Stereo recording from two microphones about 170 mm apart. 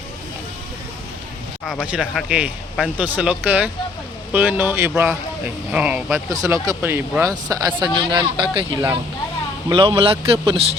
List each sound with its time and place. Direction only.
1.6 s speech: 5° left (ahead or behind)
6.3 s speech: 20° right (ahead or behind); by 10.8 s 35° right (ahead or behind)